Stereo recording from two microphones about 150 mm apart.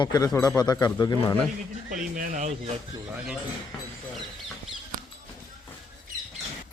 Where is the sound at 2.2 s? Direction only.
60° right (ahead or behind).